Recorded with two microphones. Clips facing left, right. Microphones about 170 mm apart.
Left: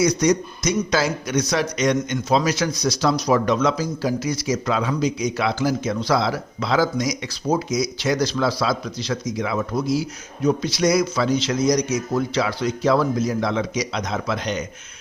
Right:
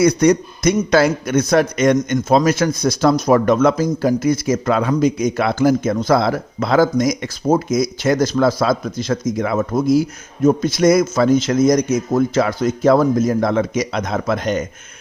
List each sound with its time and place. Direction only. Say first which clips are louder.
0.0 s a man's voice: right 5 dB; 55° right (ahead or behind)